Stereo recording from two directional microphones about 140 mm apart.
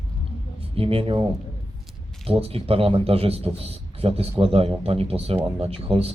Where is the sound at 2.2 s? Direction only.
45° right (ahead or behind).